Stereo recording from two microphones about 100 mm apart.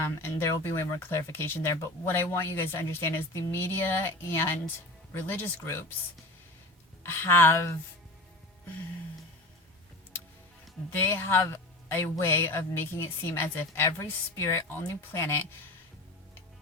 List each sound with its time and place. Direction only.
0.0 s speech: 25° left (ahead or behind)
7.0 s speech: 25° left (ahead or behind)
11.0 s speech: 25° left (ahead or behind)